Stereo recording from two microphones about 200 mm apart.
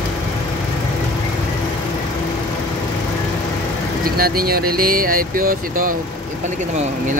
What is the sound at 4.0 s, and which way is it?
Speech, 45° right (ahead or behind).